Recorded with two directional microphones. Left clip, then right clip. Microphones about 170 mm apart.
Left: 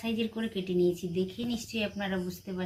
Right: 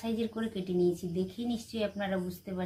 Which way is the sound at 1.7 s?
5° right (ahead or behind).